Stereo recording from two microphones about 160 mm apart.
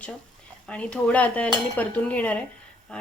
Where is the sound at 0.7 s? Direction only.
5° left (ahead or behind).